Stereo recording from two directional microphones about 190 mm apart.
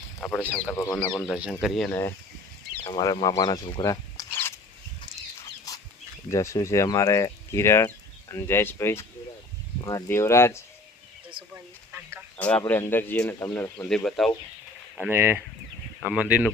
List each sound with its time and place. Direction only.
0.2 s speech: 5° left (ahead or behind)
2.8 s speech: 20° left (ahead or behind)
5.7 s bird: 20° left (ahead or behind)
6.3 s speech: 15° left (ahead or behind)
11.5 s a sound: 10° right (ahead or behind)
12.4 s speech: 10° left (ahead or behind)
15.1 s speech: 10° right (ahead or behind)